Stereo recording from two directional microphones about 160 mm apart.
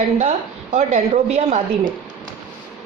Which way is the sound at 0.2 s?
45° right (ahead or behind).